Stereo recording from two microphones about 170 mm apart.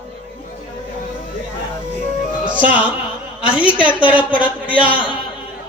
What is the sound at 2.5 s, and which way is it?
A woman's voice, 10° right (ahead or behind).